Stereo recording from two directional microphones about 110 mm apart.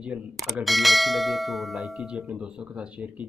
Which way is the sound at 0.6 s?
Centre (ahead or behind).